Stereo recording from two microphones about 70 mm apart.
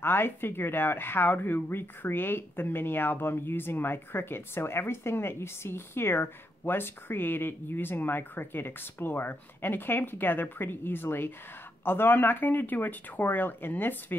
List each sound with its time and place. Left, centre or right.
0.0 s speech: left